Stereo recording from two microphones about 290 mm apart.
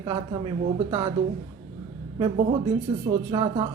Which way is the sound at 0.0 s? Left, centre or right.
Centre.